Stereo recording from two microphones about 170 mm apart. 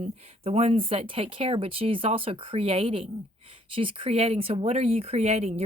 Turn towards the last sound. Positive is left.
turn(degrees=-40)  # may be behind; listen again after turning